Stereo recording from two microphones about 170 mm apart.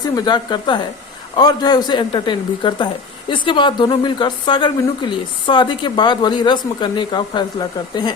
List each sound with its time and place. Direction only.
0.0 s speech: 25° left (ahead or behind)